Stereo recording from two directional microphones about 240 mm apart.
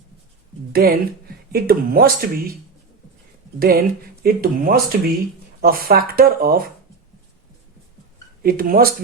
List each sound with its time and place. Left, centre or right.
0.7 s a woman's voice: right
3.6 s speech: right
8.4 s speech: right